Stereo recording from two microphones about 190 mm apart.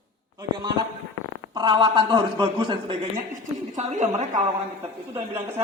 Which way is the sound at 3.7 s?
35° right (ahead or behind).